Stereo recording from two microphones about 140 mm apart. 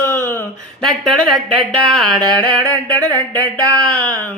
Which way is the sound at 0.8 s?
5° left (ahead or behind).